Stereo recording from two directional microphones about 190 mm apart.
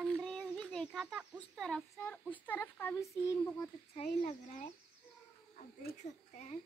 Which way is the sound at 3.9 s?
35° left (ahead or behind).